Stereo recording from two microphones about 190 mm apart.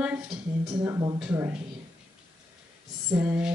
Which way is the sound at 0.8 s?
15° right (ahead or behind).